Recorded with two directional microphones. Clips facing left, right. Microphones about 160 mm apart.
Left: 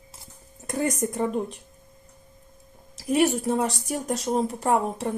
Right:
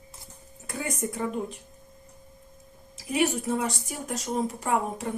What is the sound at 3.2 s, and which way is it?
A woman's voice, 35° left (ahead or behind).